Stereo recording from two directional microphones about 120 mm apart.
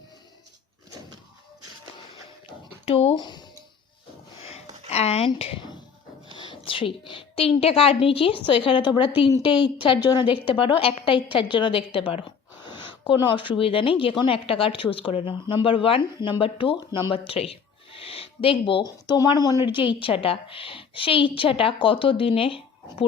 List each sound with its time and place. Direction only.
2.8 s speech: 55° left (ahead or behind)
3.2 s speech: 35° left (ahead or behind)
4.9 s speech: 60° left (ahead or behind)
6.3 s a woman's voice: 45° left (ahead or behind)
12.6 s a sound: 40° left (ahead or behind)
13.6 s speech: 50° left (ahead or behind); by 19.5 s 30° left (ahead or behind)
19.6 s speech: 40° left (ahead or behind)